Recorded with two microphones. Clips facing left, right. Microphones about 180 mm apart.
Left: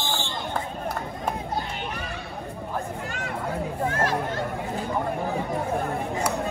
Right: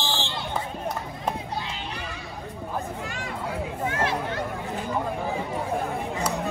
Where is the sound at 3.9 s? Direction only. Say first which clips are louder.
Even; 40° left (ahead or behind).